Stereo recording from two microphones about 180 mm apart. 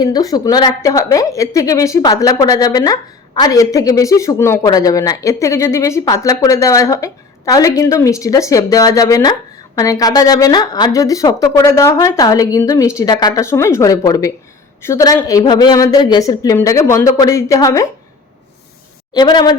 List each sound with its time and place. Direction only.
0.0 s a woman's voice: 20° left (ahead or behind)
19.1 s a woman's voice: 25° left (ahead or behind)